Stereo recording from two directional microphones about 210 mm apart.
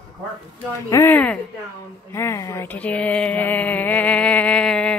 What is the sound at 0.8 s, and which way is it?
A woman's voice, 15° left (ahead or behind).